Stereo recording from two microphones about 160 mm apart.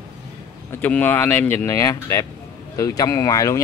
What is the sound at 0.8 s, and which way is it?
Speech, 10° left (ahead or behind).